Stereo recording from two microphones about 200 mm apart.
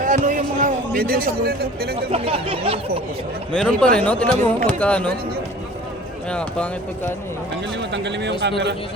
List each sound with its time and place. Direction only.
0.0 s a sound: 40° right (ahead or behind)
2.1 s speech: 30° right (ahead or behind)
3.5 s speech: 5° left (ahead or behind)
6.3 s speech: 5° left (ahead or behind)
7.8 s speech: 60° right (ahead or behind)